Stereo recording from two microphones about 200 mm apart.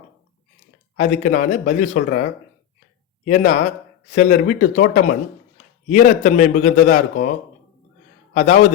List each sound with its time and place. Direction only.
0.9 s a man's voice: 35° left (ahead or behind)
3.2 s a man's voice: 35° left (ahead or behind)
8.3 s a man's voice: 35° left (ahead or behind)